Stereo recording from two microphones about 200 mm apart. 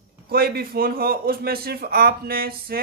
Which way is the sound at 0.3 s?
50° right (ahead or behind).